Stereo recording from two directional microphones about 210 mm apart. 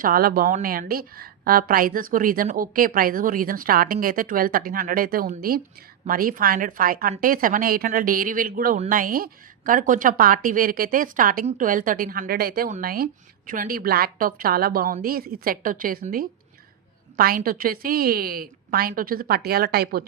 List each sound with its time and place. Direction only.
0.0 s a woman's voice: 45° right (ahead or behind)